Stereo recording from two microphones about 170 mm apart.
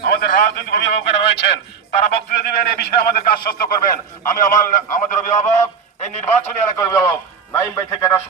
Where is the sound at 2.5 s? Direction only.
70° left (ahead or behind).